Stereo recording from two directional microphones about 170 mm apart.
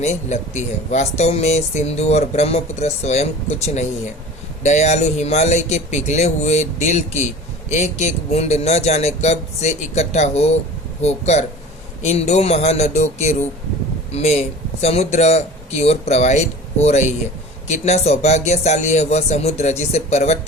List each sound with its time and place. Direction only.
0.0 s speech: 45° left (ahead or behind)